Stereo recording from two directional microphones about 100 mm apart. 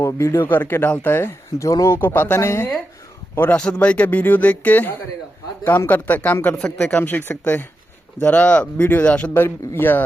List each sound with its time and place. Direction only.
0.0 s speech: 25° left (ahead or behind)